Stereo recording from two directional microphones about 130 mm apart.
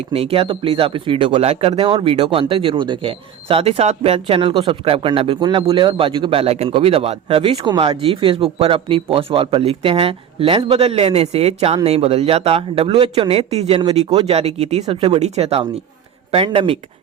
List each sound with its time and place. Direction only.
0.1 s speech: 50° right (ahead or behind)
1.9 s speech: 40° right (ahead or behind)